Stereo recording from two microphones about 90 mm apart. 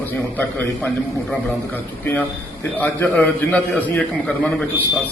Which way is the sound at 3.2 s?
15° left (ahead or behind).